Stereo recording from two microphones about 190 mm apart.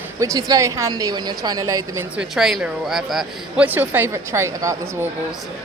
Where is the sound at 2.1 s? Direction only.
Centre (ahead or behind).